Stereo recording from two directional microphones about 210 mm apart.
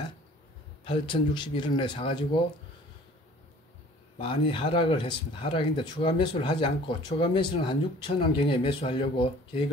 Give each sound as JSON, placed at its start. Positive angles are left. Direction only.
{"t": 0.8, "sound": "speech", "side_deg": 25}
{"t": 4.2, "sound": "speech", "side_deg": 25}